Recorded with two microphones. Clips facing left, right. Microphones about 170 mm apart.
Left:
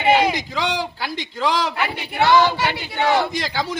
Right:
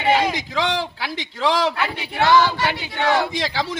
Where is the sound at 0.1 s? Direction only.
10° left (ahead or behind).